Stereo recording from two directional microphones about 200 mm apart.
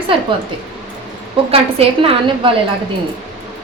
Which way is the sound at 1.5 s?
30° right (ahead or behind).